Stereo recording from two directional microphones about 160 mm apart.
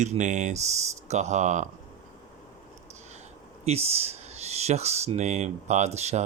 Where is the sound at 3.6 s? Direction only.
40° right (ahead or behind).